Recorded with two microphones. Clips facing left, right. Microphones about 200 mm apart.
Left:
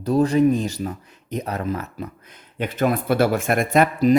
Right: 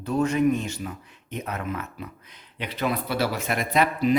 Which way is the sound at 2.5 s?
50° left (ahead or behind).